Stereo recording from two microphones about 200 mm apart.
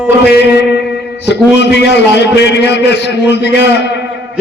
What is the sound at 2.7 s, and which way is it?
Speech, 60° left (ahead or behind).